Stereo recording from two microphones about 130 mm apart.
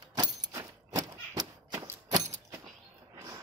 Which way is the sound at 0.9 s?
30° right (ahead or behind).